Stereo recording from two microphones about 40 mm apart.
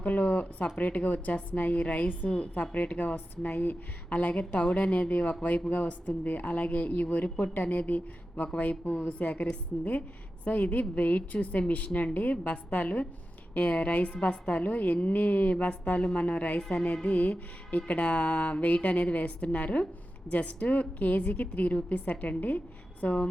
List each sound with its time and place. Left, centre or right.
0.0 s a woman's voice: left
7.9 s speech: left
8.9 s a woman's voice: left
14.6 s a woman's voice: left
16.6 s a woman's voice: centre
17.0 s a woman's voice: left